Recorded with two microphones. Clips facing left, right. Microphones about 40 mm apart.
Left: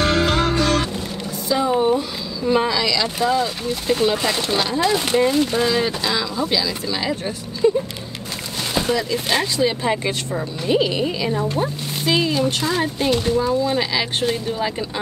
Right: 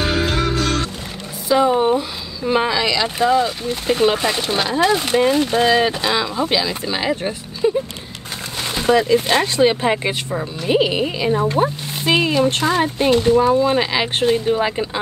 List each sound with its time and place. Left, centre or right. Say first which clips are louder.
0.0 s music: left 1 dB; centre
0.3 s music: left 1 dB; centre
1.8 s speech: right 1 dB; right
3.9 s speech: right 3 dB; right
4.2 s speech: right 1 dB; right
5.2 s speech: right 2 dB; right
8.8 s speech: right 10 dB; right
11.4 s speech: right 4 dB; right
12.8 s speech: right 4 dB; right
13.3 s speech: right 5 dB; right